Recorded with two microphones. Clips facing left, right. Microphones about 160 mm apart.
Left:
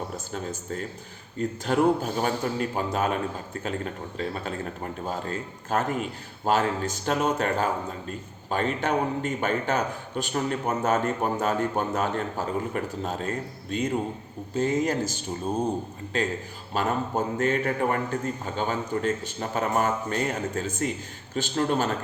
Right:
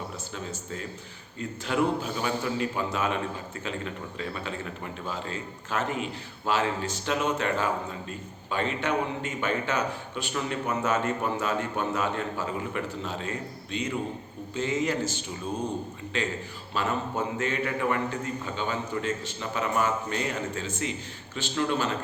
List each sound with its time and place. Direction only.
0.3 s a man's voice: 45° left (ahead or behind)
16.7 s a man's voice: 45° left (ahead or behind)